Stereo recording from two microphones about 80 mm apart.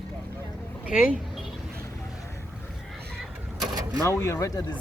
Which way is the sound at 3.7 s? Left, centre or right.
Right.